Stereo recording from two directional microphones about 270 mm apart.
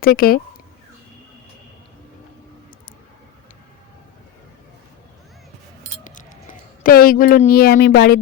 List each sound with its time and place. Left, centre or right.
0.0 s speech: left
6.1 s speech: left